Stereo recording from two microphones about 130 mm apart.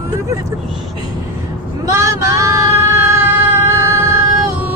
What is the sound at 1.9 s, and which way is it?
Female singing, 20° right (ahead or behind).